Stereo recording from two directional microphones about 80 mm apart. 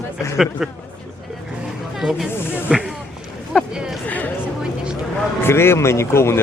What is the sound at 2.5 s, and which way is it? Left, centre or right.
Snake, centre.